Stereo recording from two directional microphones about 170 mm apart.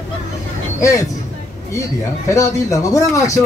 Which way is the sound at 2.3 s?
20° left (ahead or behind).